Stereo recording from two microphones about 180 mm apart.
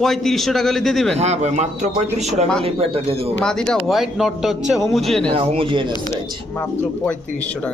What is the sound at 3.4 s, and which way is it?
A man's voice, 5° left (ahead or behind).